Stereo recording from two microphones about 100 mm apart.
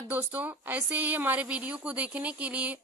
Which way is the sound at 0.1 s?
20° right (ahead or behind).